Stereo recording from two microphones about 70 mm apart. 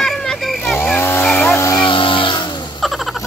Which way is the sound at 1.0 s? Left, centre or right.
Left.